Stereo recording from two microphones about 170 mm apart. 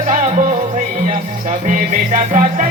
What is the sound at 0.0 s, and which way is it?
Music, 45° right (ahead or behind).